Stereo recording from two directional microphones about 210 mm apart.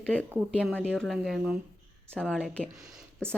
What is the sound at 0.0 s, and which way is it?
A woman's voice, 5° left (ahead or behind).